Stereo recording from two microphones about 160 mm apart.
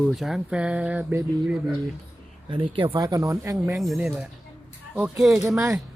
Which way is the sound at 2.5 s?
35° right (ahead or behind).